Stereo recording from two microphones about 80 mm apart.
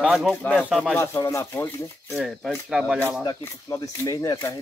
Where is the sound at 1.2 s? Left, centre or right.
Left.